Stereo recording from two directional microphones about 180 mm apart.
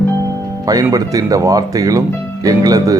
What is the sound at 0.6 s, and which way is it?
Speech, 20° right (ahead or behind).